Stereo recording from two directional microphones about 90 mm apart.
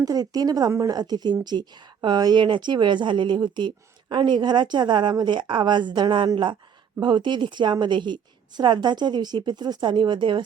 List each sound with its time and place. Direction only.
0.0 s a woman's voice: 45° right (ahead or behind); by 10.4 s 65° right (ahead or behind)